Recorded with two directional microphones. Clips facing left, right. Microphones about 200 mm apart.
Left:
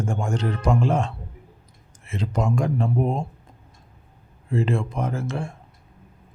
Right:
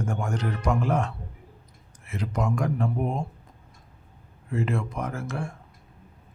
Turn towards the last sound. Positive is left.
turn(degrees=25)  # may be behind; listen again after turning